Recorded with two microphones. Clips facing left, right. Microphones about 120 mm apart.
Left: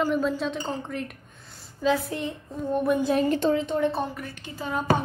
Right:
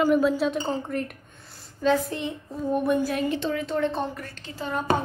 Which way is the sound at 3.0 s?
35° left (ahead or behind).